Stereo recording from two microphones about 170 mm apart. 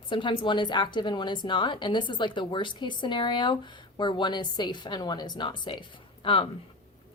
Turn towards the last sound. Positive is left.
turn(degrees=30)  # may be behind; listen again after turning